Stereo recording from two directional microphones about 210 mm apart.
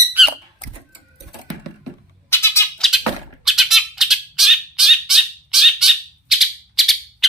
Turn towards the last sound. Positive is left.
turn(degrees=0)  # may be behind; listen again after turning